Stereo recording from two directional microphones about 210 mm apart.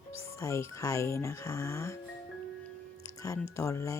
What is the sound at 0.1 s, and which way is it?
Speech, 15° left (ahead or behind).